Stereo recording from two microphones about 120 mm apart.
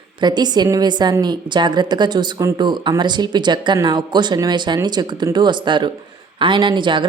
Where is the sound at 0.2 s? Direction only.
35° right (ahead or behind).